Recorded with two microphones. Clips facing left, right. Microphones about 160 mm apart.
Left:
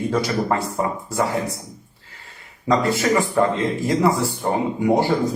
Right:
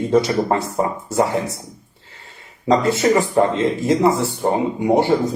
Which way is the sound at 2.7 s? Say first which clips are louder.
Right 3 dB; 25° right (ahead or behind).